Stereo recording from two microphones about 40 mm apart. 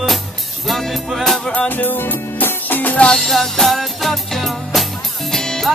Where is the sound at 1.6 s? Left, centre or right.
Left.